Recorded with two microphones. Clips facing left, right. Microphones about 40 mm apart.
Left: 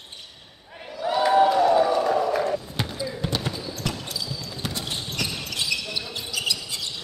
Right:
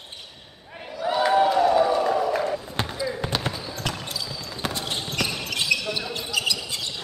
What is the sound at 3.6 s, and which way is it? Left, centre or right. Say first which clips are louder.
Basketball bounce: even; right.